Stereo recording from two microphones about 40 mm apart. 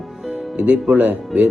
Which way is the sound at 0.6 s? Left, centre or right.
Right.